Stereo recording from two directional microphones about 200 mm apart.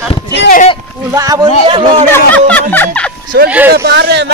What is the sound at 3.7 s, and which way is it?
Speech, 55° right (ahead or behind).